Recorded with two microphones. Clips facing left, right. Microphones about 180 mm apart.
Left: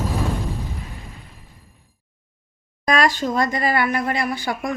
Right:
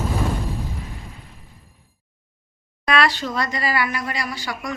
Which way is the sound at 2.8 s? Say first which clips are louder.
Left 1 dB; 45° left (ahead or behind).